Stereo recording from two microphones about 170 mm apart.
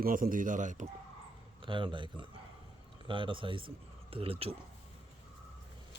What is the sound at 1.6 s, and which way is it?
Speech, 30° right (ahead or behind).